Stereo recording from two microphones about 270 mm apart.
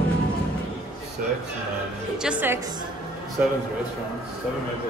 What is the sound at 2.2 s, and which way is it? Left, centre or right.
Speech, centre.